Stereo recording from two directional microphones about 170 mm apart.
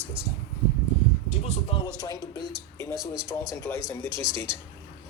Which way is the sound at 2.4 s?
25° right (ahead or behind).